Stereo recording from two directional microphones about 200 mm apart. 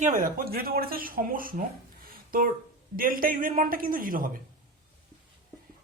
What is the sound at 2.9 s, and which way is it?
Speech, 45° right (ahead or behind).